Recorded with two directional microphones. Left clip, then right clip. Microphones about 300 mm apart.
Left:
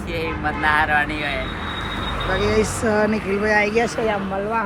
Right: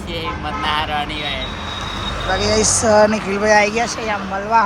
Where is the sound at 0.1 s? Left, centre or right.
Centre.